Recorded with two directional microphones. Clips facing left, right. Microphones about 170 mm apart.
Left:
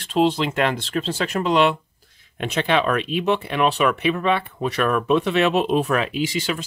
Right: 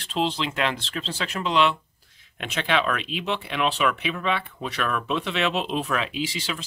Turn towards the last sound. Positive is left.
turn(degrees=50)  # may be behind; listen again after turning